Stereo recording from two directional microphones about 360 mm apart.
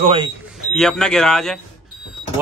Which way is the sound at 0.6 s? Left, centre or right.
Centre.